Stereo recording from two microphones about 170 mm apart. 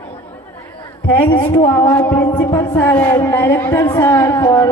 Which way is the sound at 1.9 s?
10° left (ahead or behind).